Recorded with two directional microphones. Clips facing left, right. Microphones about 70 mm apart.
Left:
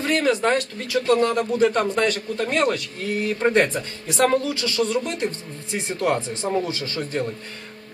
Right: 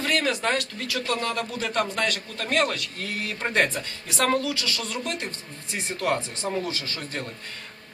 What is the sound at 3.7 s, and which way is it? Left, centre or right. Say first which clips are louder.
Speech: left 5 dB; left.